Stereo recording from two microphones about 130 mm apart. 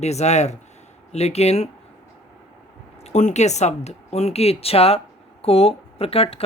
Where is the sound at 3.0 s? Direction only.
60° left (ahead or behind).